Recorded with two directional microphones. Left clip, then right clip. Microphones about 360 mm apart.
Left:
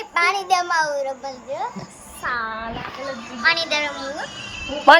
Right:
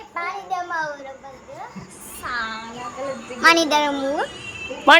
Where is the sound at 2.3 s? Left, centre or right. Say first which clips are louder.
Right 1 dB; centre.